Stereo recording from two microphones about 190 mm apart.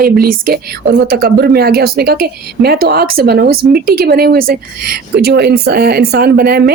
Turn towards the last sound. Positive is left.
turn(degrees=-55)  # may be behind; listen again after turning